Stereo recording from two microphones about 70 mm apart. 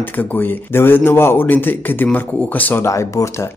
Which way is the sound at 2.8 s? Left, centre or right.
Left.